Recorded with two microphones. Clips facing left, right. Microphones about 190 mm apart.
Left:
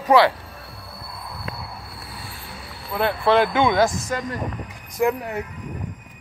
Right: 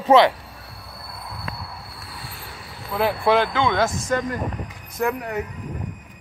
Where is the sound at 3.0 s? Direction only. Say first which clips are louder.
Even; 5° right (ahead or behind).